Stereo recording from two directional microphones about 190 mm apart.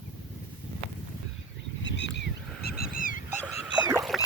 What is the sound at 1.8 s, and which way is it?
Goose, 70° left (ahead or behind).